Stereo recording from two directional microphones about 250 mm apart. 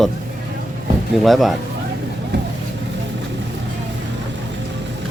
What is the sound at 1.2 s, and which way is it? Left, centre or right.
Speech, centre.